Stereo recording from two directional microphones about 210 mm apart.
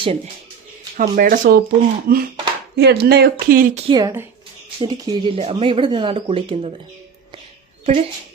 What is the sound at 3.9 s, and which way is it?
Speech, 15° right (ahead or behind).